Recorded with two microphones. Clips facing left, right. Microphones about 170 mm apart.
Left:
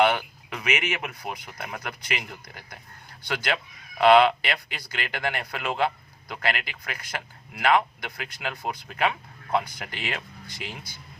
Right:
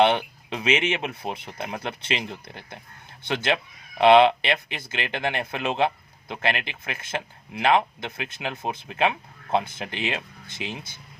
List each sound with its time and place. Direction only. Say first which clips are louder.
0.0 s speech: right 2 dB; 25° right (ahead or behind)